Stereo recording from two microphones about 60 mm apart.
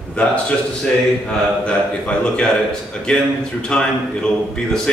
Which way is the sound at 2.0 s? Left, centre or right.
Centre.